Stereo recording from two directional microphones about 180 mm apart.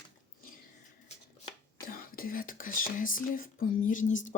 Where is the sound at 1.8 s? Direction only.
55° left (ahead or behind).